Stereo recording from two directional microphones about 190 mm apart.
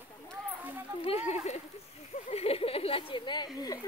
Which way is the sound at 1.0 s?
35° left (ahead or behind).